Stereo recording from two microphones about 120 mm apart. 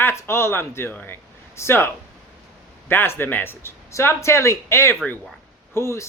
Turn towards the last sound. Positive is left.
turn(degrees=25)  # may be behind; listen again after turning